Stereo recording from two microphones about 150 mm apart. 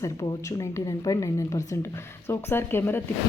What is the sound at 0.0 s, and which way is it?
A woman's voice, 25° left (ahead or behind).